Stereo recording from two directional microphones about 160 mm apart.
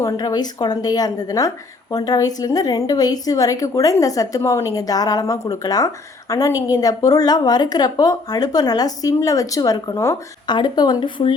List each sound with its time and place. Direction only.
0.0 s a woman's voice: 25° left (ahead or behind)